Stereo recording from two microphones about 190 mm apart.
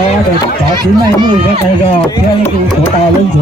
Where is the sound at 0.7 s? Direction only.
25° right (ahead or behind).